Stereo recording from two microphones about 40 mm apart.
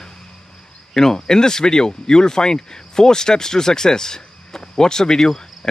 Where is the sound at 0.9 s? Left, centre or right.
Centre.